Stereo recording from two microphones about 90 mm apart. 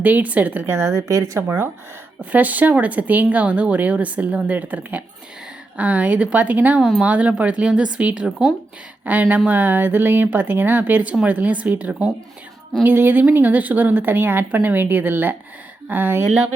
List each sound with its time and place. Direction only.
0.0 s speech: 15° right (ahead or behind)
0.9 s speech: 35° right (ahead or behind)
2.3 s a woman's voice: 20° right (ahead or behind)
12.8 s a woman's voice: 25° right (ahead or behind)